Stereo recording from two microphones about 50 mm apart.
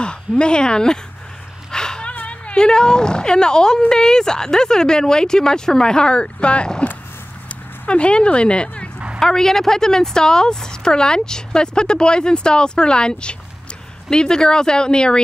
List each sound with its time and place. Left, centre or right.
0.0 s speech: centre
1.7 s a sound: centre
2.1 s speech: left
7.4 s dog: left
9.2 s speech: centre